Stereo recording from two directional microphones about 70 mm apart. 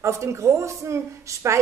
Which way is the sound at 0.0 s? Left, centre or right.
Right.